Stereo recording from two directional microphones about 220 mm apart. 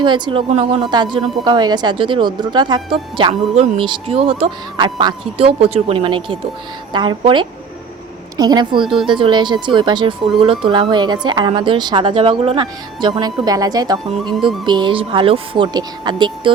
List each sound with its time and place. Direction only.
0.0 s a woman's voice: 20° right (ahead or behind)